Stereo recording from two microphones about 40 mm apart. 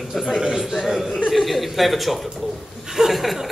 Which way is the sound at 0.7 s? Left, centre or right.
Centre.